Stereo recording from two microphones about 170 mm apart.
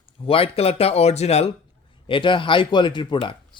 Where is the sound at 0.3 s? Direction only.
35° left (ahead or behind).